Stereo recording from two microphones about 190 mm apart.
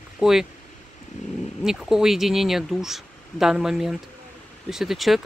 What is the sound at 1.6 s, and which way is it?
Speech, 5° right (ahead or behind).